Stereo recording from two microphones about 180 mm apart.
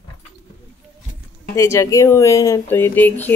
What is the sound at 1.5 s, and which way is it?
Speech, 15° left (ahead or behind).